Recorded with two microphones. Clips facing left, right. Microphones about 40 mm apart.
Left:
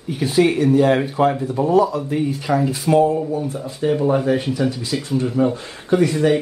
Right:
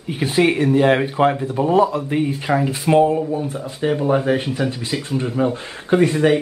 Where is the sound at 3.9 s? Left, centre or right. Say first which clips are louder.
Even; centre.